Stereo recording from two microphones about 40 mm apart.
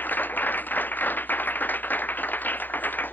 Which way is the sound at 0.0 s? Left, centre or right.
Left.